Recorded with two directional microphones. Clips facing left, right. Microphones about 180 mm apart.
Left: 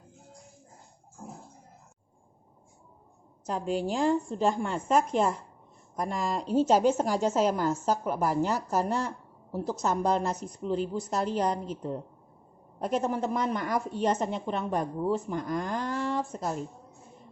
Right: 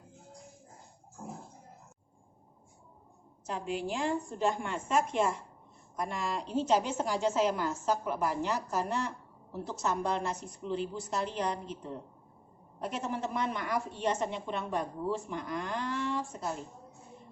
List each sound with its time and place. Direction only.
3.4 s a woman's voice: 40° left (ahead or behind)